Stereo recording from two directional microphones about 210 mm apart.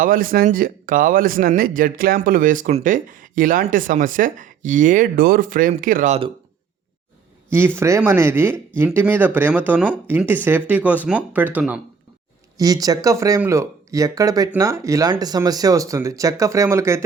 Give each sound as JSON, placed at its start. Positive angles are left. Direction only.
{"t": 0.0, "sound": "speech", "side_deg": -40}
{"t": 7.8, "sound": "speech", "side_deg": -15}